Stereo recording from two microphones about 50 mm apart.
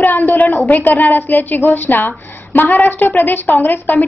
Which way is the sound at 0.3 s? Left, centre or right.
Left.